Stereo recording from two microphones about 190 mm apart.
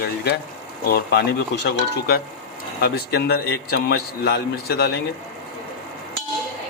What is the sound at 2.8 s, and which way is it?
A man's voice, 55° left (ahead or behind).